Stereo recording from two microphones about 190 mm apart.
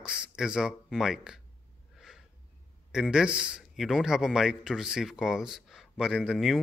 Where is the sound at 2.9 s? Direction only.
5° right (ahead or behind).